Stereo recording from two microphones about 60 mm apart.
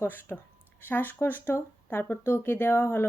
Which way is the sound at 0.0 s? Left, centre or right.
Left.